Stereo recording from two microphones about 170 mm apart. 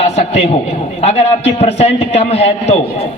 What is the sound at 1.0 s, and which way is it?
A man's voice, 35° left (ahead or behind).